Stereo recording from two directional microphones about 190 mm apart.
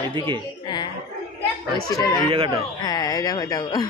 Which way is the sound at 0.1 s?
25° right (ahead or behind).